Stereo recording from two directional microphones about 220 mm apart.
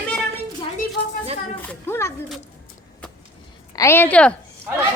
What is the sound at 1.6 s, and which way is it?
Speech, 10° left (ahead or behind).